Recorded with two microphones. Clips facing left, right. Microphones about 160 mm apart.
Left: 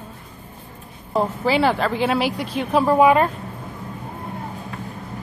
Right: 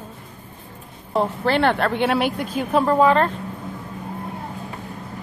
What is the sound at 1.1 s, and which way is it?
A woman's voice, 5° left (ahead or behind).